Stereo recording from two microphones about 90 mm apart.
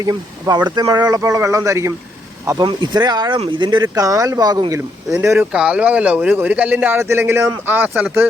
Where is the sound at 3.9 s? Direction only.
40° right (ahead or behind).